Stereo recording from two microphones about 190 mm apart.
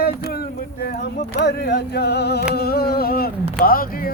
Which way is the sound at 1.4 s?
60° left (ahead or behind).